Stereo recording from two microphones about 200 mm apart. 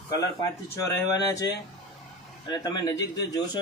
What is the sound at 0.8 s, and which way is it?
Speech, 15° left (ahead or behind).